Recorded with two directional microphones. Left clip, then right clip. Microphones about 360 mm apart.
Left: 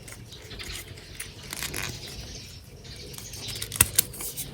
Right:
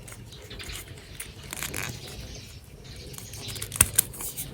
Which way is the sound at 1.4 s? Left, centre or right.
Centre.